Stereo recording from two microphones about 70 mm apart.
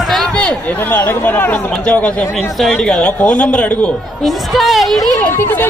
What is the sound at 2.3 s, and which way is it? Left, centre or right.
Speech, centre.